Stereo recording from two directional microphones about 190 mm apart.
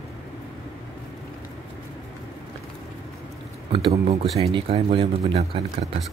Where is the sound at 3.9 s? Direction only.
35° right (ahead or behind).